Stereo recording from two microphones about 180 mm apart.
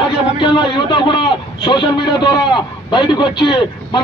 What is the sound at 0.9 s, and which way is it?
A man's voice, 25° left (ahead or behind).